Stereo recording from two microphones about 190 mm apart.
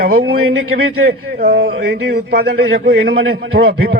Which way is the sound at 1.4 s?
55° right (ahead or behind).